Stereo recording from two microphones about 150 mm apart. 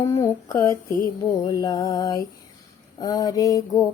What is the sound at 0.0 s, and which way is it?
Mantra, 20° left (ahead or behind).